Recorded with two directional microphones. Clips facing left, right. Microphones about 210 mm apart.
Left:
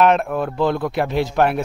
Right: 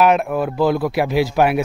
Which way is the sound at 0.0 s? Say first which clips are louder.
Right 1 dB; 5° right (ahead or behind).